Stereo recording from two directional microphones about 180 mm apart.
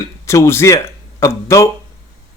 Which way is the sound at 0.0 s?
15° left (ahead or behind).